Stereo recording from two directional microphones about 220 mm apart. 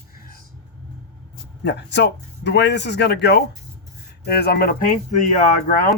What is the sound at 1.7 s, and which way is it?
Speech, 50° left (ahead or behind).